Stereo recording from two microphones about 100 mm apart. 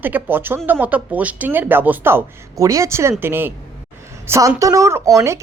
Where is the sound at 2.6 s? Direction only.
30° right (ahead or behind).